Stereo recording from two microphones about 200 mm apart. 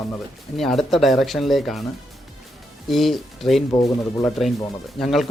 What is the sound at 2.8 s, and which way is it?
Speech, centre (ahead or behind).